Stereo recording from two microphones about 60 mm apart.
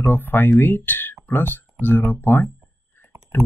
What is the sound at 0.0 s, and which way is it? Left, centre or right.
Speech, left.